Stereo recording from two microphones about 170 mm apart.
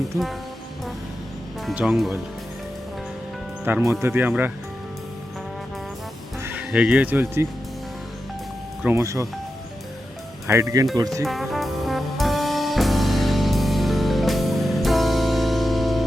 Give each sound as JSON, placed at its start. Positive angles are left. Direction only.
{"t": 0.1, "sound": "speech", "side_deg": -15}
{"t": 1.6, "sound": "speech", "side_deg": -5}
{"t": 3.6, "sound": "speech", "side_deg": -10}
{"t": 6.4, "sound": "speech", "side_deg": -10}
{"t": 8.8, "sound": "speech", "side_deg": -15}
{"t": 10.4, "sound": "speech", "side_deg": -15}
{"t": 11.3, "sound": "brass instrument", "side_deg": 0}